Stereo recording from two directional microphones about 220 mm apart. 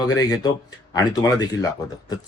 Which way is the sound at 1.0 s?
15° left (ahead or behind).